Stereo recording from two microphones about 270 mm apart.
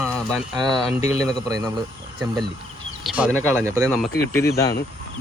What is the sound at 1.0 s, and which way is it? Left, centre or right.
Speech, left.